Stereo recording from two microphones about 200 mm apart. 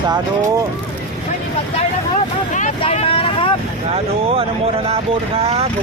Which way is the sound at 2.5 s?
35° left (ahead or behind).